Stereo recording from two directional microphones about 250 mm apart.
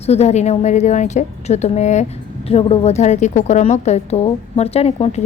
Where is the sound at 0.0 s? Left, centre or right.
Left.